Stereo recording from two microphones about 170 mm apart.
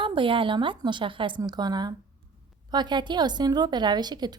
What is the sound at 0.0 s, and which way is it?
A woman's voice, 30° right (ahead or behind).